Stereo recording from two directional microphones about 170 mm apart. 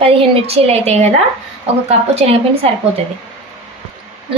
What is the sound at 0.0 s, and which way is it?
A woman's voice, 35° right (ahead or behind).